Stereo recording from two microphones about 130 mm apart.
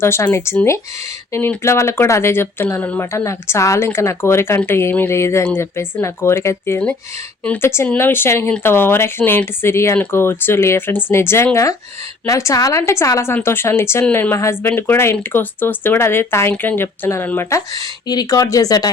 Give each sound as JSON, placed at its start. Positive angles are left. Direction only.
{"t": 0.0, "sound": "speech", "side_deg": 20}
{"t": 18.1, "sound": "speech", "side_deg": 30}